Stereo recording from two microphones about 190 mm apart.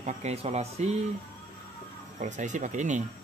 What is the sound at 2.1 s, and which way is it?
Speech, 40° right (ahead or behind).